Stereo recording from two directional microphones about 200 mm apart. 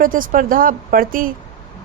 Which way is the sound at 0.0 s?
45° right (ahead or behind).